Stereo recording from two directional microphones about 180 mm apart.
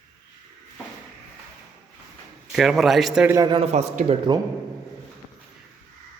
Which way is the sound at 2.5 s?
Centre (ahead or behind).